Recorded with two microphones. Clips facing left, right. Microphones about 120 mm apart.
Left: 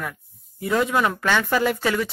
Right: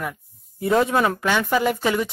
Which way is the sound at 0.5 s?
30° right (ahead or behind).